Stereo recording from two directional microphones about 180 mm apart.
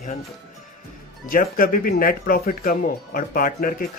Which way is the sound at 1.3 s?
50° left (ahead or behind).